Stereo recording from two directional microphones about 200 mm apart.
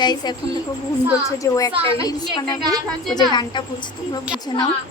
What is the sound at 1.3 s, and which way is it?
Speech, 15° left (ahead or behind).